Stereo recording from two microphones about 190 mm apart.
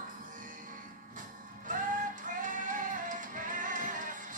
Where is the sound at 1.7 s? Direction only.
45° right (ahead or behind).